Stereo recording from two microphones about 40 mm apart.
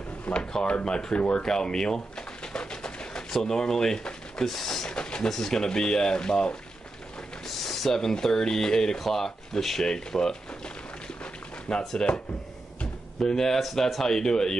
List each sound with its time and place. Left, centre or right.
0.2 s drawer open or close: left
0.7 s speech: left
1.3 s pigeon: centre
3.3 s speech: centre
4.8 s a sound: left
5.3 s speech: centre
7.4 s speech: centre
11.7 s speech: left
13.2 s speech: centre
13.6 s speech: centre
14.0 s speech: centre